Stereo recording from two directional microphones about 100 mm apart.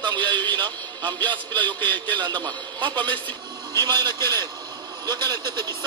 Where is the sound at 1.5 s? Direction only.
15° left (ahead or behind).